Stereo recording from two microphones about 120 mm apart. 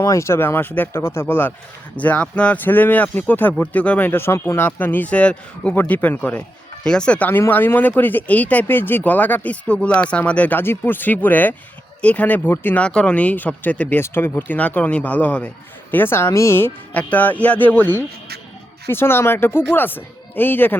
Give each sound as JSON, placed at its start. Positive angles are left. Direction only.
{"t": 0.0, "sound": "speech", "side_deg": 25}